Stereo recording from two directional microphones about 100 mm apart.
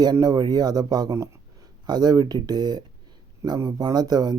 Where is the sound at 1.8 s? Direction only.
45° right (ahead or behind).